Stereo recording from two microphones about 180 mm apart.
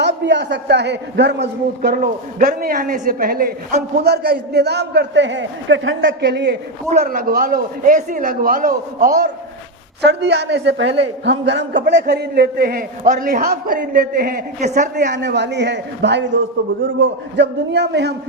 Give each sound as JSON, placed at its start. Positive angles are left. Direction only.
{"t": 0.0, "sound": "a man's voice", "side_deg": -75}
{"t": 7.0, "sound": "a man's voice", "side_deg": -50}
{"t": 10.0, "sound": "a man's voice", "side_deg": -75}
{"t": 14.9, "sound": "a man's voice", "side_deg": -70}